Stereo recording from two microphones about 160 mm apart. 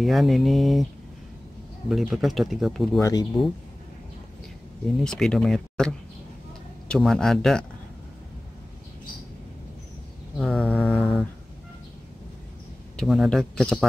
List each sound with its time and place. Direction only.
0.0 s speech: centre (ahead or behind)
1.9 s speech: centre (ahead or behind)
3.0 s speech: 20° left (ahead or behind)
5.0 s speech: 5° left (ahead or behind)
10.3 s mantra: 5° left (ahead or behind)
12.9 s speech: centre (ahead or behind)